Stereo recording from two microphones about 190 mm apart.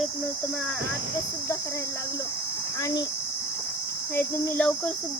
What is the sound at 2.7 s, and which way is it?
Speech, 20° left (ahead or behind).